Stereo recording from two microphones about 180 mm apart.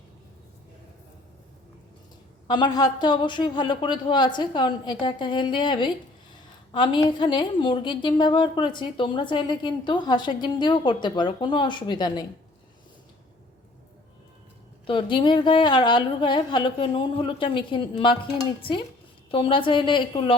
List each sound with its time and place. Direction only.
2.5 s a woman's voice: 25° left (ahead or behind)
14.8 s a woman's voice: 25° left (ahead or behind)
19.3 s a woman's voice: 30° left (ahead or behind)